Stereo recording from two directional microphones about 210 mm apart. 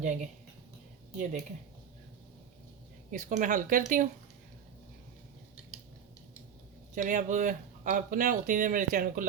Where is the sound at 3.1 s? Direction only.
40° right (ahead or behind).